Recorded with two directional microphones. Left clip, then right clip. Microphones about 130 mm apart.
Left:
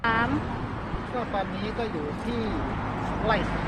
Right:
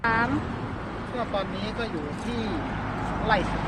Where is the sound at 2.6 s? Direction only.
15° right (ahead or behind).